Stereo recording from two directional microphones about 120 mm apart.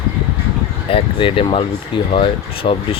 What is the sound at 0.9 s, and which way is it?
Speech, 45° left (ahead or behind).